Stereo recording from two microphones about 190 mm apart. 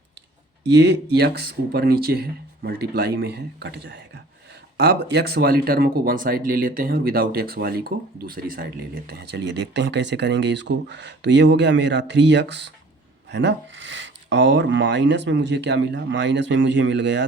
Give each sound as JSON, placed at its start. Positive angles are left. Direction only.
{"t": 0.7, "sound": "speech", "side_deg": -65}